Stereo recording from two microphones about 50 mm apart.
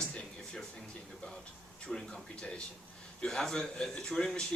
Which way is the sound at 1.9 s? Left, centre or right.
Centre.